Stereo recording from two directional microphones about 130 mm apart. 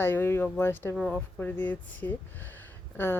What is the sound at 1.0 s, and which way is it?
Speech, 5° left (ahead or behind).